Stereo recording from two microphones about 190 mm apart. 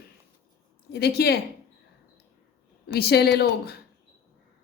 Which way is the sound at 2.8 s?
55° left (ahead or behind).